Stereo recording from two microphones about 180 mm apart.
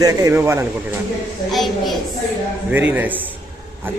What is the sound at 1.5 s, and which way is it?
A child's voice, centre (ahead or behind).